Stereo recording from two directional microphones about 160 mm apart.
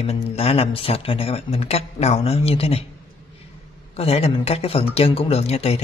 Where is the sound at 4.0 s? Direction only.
40° left (ahead or behind).